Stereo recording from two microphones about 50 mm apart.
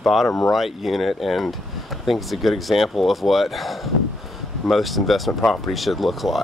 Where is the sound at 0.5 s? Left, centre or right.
Centre.